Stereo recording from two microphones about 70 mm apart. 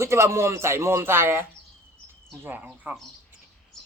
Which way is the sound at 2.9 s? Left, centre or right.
Right.